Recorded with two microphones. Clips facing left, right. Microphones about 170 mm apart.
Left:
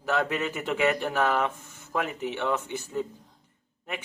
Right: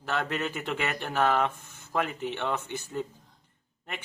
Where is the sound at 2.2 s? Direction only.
5° left (ahead or behind).